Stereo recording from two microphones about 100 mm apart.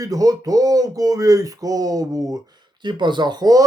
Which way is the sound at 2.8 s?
50° right (ahead or behind).